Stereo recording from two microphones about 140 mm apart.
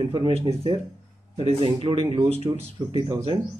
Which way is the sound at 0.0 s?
40° right (ahead or behind).